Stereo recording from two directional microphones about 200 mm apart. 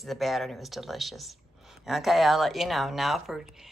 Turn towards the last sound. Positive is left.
turn(degrees=0)  # may be behind; listen again after turning